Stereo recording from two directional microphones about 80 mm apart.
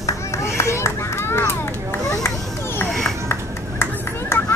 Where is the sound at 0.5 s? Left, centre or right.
Left.